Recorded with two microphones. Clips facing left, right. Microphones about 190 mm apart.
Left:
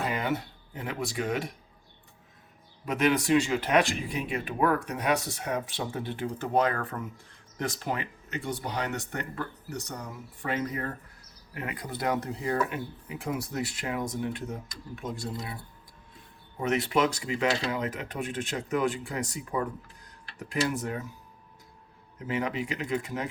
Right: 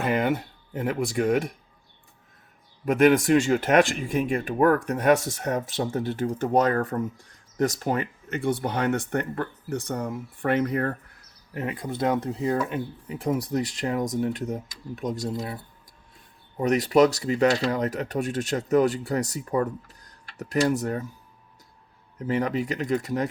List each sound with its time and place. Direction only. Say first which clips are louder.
0.0 s speech: right 6 dB; 55° right (ahead or behind)
2.8 s speech: right 7 dB; 50° right (ahead or behind); by 10.9 s 65° right (ahead or behind)
11.5 s speech: right 6 dB; 30° right (ahead or behind)
13.5 s speech: right 6 dB; 40° right (ahead or behind)
16.6 s speech: right 7 dB; 40° right (ahead or behind)
22.4 s speech: right 5 dB; 40° right (ahead or behind)